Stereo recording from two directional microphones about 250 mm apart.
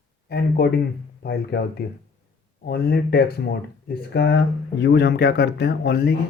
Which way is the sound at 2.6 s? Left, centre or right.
Left.